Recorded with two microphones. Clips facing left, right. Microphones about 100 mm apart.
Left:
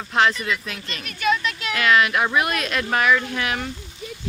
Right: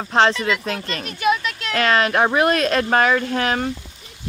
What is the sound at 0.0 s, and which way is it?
Speech, 30° right (ahead or behind).